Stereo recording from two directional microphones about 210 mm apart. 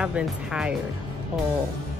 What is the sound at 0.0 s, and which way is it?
Speech, 5° right (ahead or behind).